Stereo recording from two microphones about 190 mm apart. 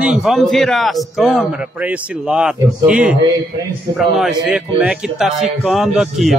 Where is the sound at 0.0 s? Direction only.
5° right (ahead or behind).